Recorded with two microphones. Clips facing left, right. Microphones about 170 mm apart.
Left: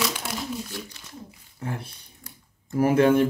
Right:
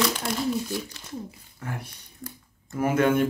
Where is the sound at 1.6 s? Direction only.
30° left (ahead or behind).